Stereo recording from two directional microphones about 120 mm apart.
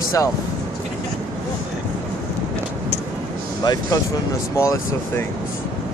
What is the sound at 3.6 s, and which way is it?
Speech, 35° left (ahead or behind).